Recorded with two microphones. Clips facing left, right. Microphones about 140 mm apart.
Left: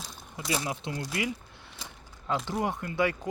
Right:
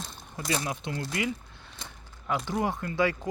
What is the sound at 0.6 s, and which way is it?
Speech, 25° left (ahead or behind).